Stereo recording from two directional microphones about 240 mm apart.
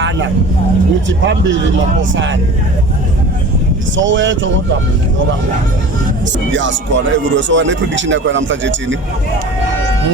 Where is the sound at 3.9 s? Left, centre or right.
Right.